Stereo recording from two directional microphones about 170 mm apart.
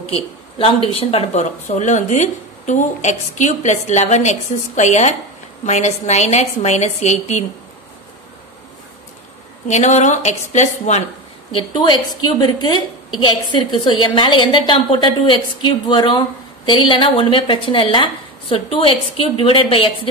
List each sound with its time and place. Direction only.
0.0 s a woman's voice: 35° left (ahead or behind)
9.7 s speech: 45° left (ahead or behind)
11.5 s a woman's voice: 25° left (ahead or behind)